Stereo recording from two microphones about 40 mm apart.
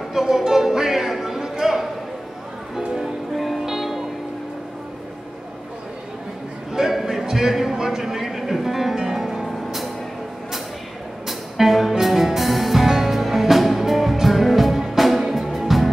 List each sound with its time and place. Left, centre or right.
0.1 s music: centre
2.7 s music: right
3.6 s music: centre
6.7 s a sound: centre
11.2 s music: centre